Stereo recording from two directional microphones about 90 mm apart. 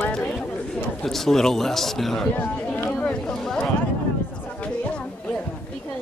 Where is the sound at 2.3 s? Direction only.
20° left (ahead or behind).